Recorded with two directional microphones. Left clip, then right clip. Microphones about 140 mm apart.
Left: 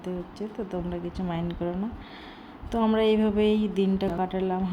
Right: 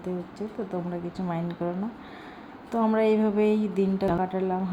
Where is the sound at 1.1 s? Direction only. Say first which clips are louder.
Right 1 dB; 10° right (ahead or behind).